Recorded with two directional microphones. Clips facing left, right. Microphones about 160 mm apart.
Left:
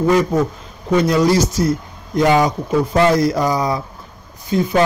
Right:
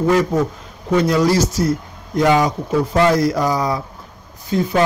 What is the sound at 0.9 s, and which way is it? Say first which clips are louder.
A man's voice: left 1 dB; 20° left (ahead or behind).